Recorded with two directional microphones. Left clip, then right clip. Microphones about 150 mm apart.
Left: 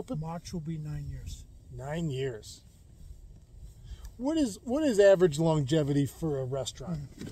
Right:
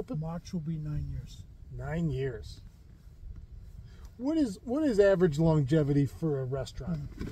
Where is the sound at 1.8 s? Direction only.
20° left (ahead or behind).